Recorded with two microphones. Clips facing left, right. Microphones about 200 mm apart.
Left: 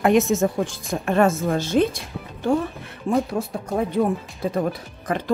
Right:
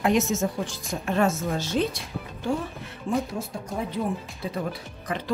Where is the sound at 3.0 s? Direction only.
60° left (ahead or behind).